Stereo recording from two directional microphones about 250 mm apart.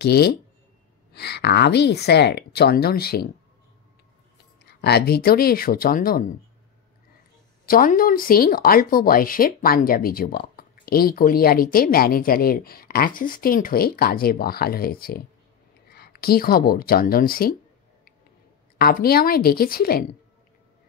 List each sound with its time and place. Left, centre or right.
0.0 s speech: left
4.8 s speech: left
7.6 s speech: left
18.8 s speech: left